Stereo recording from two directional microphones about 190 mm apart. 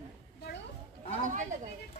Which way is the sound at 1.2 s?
40° right (ahead or behind).